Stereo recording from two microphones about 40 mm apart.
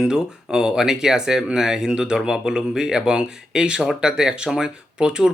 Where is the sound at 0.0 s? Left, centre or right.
Centre.